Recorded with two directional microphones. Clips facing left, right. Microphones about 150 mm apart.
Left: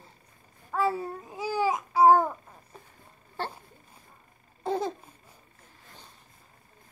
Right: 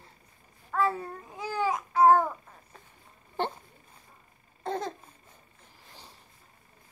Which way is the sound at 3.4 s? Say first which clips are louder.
Right 4 dB; 20° right (ahead or behind).